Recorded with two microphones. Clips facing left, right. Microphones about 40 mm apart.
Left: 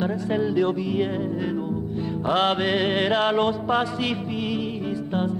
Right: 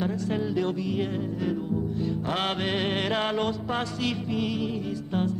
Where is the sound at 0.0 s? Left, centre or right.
Centre.